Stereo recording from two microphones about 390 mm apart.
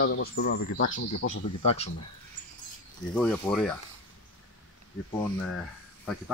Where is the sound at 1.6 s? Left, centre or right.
Centre.